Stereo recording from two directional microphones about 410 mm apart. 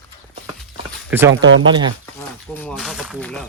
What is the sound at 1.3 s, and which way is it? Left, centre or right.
Speech, right.